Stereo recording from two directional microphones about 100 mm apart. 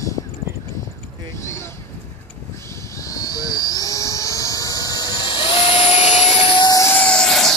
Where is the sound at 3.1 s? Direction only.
40° left (ahead or behind); by 6.7 s 60° left (ahead or behind).